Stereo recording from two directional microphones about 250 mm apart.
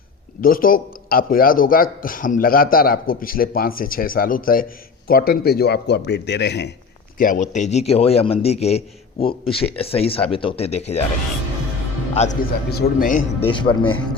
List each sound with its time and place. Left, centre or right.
0.4 s a man's voice: left
7.2 s a man's voice: left
12.1 s a man's voice: left
13.5 s a man's voice: centre